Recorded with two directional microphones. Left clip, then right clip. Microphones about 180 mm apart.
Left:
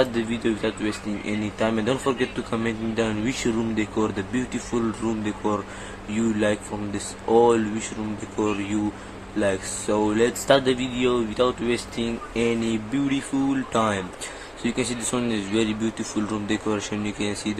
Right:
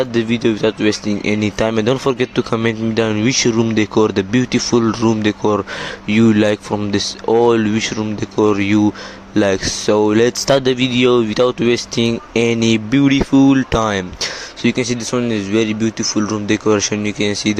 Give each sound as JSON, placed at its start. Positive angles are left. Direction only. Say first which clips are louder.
{"t": 0.0, "sound": "speech", "louder": "right 7 dB", "side_deg": -45}
{"t": 9.4, "sound": "speech", "louder": "right 9 dB", "side_deg": -50}
{"t": 14.6, "sound": "speech", "louder": "right 9 dB", "side_deg": -40}